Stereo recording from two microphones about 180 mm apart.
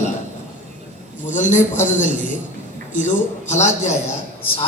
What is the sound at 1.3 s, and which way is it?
A man's voice, 45° left (ahead or behind).